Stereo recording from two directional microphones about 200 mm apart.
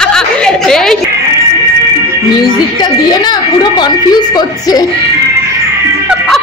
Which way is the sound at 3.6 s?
20° left (ahead or behind).